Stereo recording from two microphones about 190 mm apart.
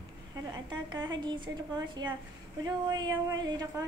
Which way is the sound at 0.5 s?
20° right (ahead or behind).